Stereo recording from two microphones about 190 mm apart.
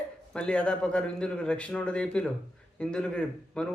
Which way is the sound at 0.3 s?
5° left (ahead or behind).